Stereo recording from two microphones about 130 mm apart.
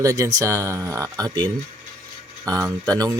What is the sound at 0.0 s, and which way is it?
Speech, 25° right (ahead or behind).